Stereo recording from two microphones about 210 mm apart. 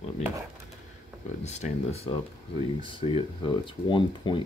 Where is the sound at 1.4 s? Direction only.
35° left (ahead or behind).